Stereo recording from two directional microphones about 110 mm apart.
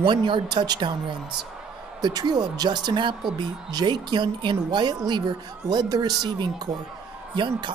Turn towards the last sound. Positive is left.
turn(degrees=-45)  # may be behind; listen again after turning